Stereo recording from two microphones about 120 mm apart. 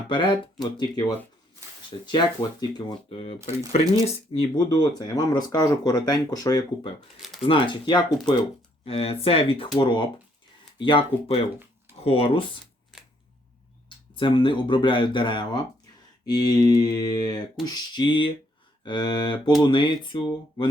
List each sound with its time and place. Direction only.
0.1 s speech: 45° left (ahead or behind)
4.0 s speech: 50° left (ahead or behind); by 6.7 s 30° left (ahead or behind)
7.4 s speech: 45° left (ahead or behind)
8.8 s speech: 55° left (ahead or behind)
14.2 s speech: 40° left (ahead or behind)